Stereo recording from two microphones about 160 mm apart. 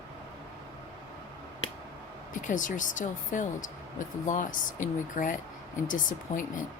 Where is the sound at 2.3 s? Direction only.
55° left (ahead or behind).